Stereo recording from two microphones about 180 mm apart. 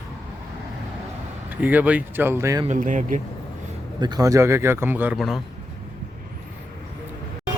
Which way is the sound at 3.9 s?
25° right (ahead or behind).